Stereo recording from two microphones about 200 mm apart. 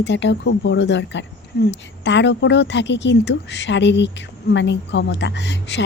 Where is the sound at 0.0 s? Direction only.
60° left (ahead or behind).